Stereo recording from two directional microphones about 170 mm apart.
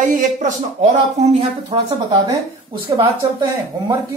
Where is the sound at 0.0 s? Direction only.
50° right (ahead or behind).